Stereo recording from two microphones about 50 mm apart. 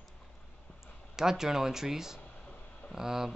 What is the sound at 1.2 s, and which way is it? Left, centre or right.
Speech, centre.